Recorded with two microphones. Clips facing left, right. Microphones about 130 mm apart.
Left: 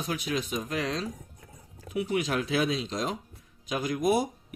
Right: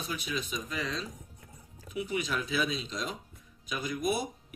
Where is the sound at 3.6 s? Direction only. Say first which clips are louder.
Left 5 dB; 90° left.